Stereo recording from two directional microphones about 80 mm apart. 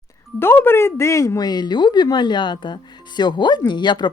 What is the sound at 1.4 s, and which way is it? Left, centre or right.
Speech, left.